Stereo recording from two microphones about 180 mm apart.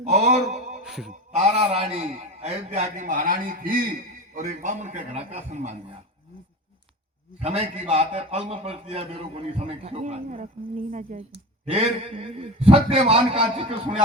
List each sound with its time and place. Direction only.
0.0 s speech: 40° right (ahead or behind)
0.9 s speech: centre (ahead or behind)
1.4 s a man's voice: 35° right (ahead or behind)
7.4 s a man's voice: 35° right (ahead or behind)
11.7 s a man's voice: 30° right (ahead or behind)